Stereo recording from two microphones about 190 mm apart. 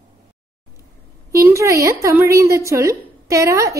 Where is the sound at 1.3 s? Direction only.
15° right (ahead or behind).